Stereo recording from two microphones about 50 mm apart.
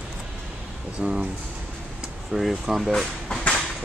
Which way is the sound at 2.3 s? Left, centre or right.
Right.